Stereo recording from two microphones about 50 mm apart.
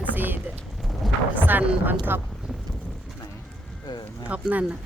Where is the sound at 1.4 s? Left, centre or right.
Right.